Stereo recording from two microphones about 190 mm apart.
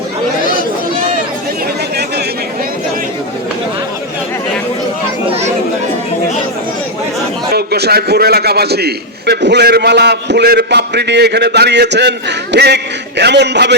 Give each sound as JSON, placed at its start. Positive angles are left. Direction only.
{"t": 7.5, "sound": "a man's voice", "side_deg": -55}